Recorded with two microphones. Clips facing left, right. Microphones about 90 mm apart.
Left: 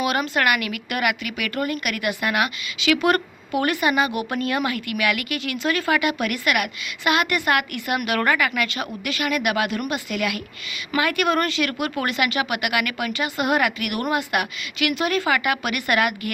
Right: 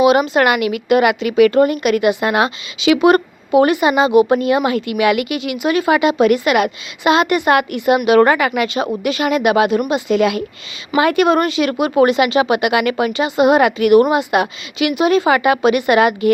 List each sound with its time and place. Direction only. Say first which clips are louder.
0.0 s speech: right 9 dB; 20° right (ahead or behind)